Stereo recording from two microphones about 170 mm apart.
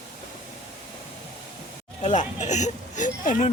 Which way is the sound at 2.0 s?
45° left (ahead or behind).